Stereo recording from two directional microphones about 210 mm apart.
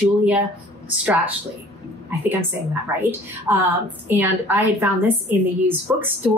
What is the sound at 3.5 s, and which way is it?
A woman's voice, 10° right (ahead or behind).